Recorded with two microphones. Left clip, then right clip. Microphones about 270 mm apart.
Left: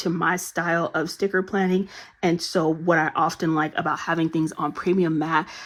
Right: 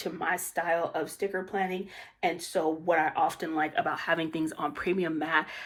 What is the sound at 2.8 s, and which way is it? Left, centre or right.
Speech, left.